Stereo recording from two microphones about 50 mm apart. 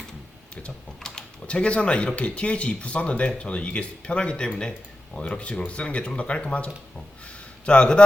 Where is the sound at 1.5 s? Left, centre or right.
Left.